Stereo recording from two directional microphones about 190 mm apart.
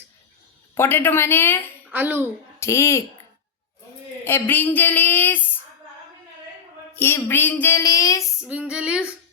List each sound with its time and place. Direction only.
0.8 s speech: 10° left (ahead or behind)
1.9 s a child's voice: 10° right (ahead or behind)
2.6 s speech: 15° left (ahead or behind)
4.2 s speech: 10° left (ahead or behind)
6.9 s speech: 10° left (ahead or behind)
8.4 s female singing: 5° right (ahead or behind)